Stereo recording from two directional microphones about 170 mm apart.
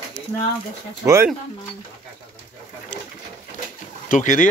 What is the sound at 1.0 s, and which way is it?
Speech, 15° right (ahead or behind).